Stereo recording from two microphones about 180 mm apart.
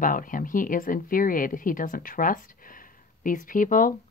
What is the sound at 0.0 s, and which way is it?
Speech, 50° left (ahead or behind).